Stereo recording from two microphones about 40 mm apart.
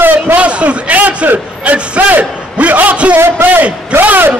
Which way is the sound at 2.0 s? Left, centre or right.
Right.